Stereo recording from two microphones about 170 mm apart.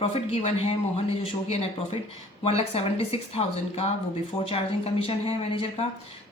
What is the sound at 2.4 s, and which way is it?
Speech, 35° left (ahead or behind).